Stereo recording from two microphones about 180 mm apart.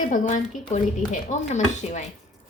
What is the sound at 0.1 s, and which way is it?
Speech, 45° left (ahead or behind).